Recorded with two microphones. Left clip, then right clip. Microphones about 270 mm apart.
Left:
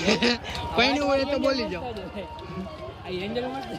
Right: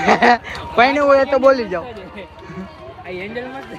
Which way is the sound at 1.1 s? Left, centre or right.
Right.